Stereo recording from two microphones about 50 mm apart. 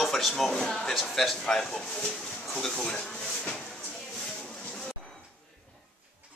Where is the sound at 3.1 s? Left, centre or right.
Centre.